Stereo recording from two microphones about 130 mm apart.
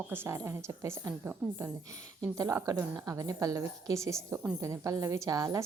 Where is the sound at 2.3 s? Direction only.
25° right (ahead or behind).